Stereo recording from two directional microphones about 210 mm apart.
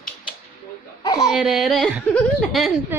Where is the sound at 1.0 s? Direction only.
15° left (ahead or behind).